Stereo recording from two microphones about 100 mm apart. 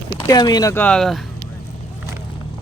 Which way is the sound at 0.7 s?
10° left (ahead or behind).